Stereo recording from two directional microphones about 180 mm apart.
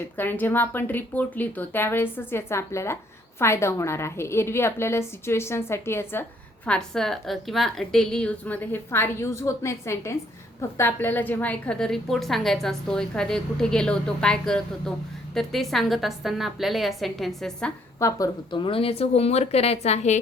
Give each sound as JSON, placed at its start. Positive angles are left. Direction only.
{"t": 0.2, "sound": "a woman's voice", "side_deg": 10}
{"t": 18.0, "sound": "speech", "side_deg": 20}